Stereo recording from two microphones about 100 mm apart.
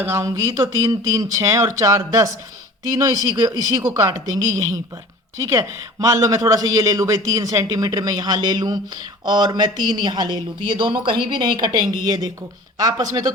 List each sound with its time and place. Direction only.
0.0 s speech: 30° right (ahead or behind)